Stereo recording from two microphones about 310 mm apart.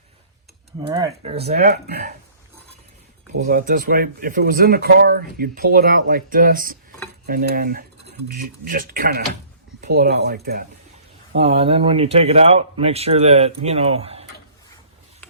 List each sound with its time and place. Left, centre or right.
0.8 s speech: centre
1.5 s speech: right
3.4 s speech: right
11.3 s speech: centre